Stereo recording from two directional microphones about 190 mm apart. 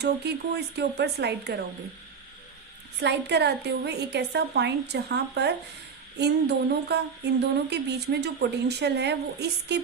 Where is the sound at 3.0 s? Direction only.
65° right (ahead or behind).